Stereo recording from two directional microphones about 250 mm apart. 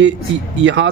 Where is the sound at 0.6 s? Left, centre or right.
Right.